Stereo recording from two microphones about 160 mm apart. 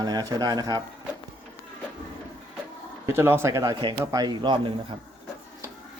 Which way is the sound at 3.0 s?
15° right (ahead or behind).